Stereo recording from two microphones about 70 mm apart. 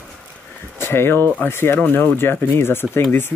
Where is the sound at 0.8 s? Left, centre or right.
Left.